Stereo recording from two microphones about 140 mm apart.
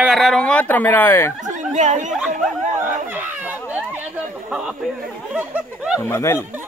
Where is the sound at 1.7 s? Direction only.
60° right (ahead or behind).